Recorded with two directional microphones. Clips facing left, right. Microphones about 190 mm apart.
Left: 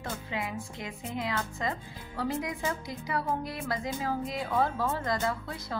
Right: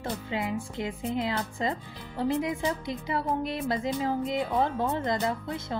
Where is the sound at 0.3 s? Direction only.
25° right (ahead or behind).